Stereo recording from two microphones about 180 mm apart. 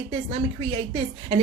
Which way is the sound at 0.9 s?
35° right (ahead or behind).